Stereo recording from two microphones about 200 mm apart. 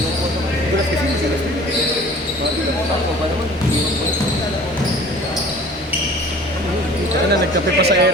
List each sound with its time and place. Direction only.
7.8 s speech: 55° right (ahead or behind)